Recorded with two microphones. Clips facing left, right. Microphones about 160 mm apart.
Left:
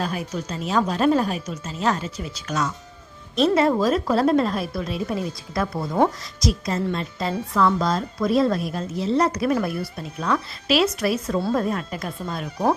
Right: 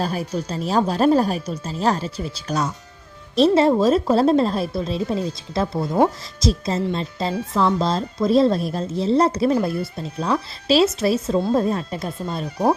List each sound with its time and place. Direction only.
0.0 s speech: 35° right (ahead or behind)